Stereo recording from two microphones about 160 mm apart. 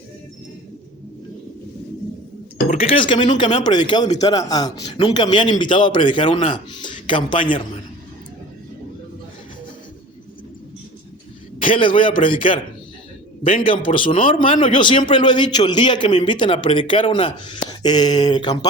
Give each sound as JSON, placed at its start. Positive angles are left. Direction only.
{"t": 2.7, "sound": "a man's voice", "side_deg": 35}
{"t": 11.6, "sound": "speech", "side_deg": 35}
{"t": 13.7, "sound": "a man's voice", "side_deg": 30}